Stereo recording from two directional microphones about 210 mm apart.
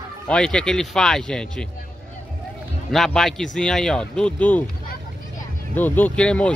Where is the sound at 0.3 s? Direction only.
5° left (ahead or behind).